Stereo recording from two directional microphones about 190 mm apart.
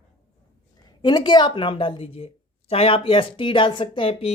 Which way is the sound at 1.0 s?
25° left (ahead or behind).